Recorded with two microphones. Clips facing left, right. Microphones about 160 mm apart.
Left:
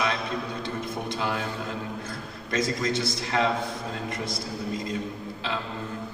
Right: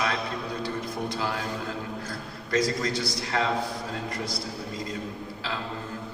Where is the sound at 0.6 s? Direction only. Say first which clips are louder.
Right 1 dB; 25° left (ahead or behind).